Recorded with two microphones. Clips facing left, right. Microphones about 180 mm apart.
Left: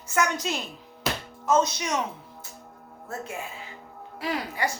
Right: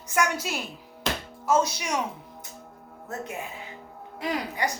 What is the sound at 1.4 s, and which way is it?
A woman's voice, 10° right (ahead or behind).